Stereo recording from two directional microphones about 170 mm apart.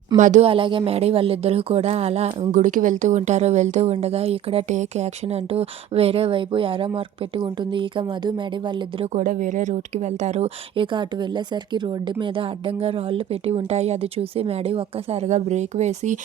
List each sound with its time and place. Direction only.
0.2 s speech: 50° right (ahead or behind)
0.4 s speech: 30° right (ahead or behind)
9.1 s speech: 50° right (ahead or behind)
10.9 s speech: 25° right (ahead or behind); by 16.1 s 40° right (ahead or behind)